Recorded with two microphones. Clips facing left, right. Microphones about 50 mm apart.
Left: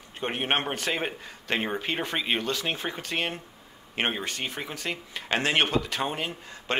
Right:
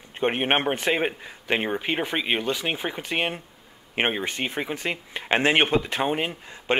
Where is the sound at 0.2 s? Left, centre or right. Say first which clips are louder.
Right 5 dB; right.